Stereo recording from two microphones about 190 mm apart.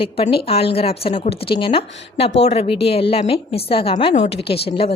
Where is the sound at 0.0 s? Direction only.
30° left (ahead or behind).